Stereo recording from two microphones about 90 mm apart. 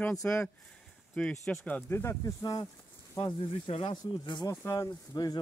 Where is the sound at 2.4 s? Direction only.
40° left (ahead or behind).